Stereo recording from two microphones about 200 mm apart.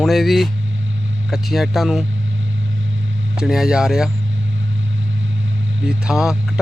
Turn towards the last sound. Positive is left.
turn(degrees=0)  # may be behind; listen again after turning